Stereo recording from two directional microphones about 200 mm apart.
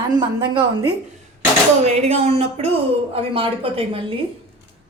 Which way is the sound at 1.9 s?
30° right (ahead or behind).